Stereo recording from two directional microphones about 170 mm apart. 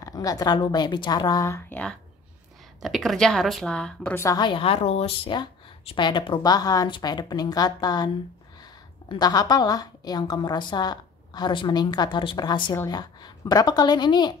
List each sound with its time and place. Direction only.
0.0 s a woman's voice: 20° left (ahead or behind)
4.2 s a woman's voice: 20° left (ahead or behind)
9.1 s a woman's voice: 25° left (ahead or behind)